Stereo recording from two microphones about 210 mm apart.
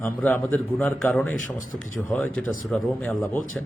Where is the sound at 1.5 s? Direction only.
40° left (ahead or behind).